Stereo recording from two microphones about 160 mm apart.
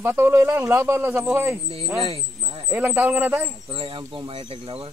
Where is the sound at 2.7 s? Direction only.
10° right (ahead or behind).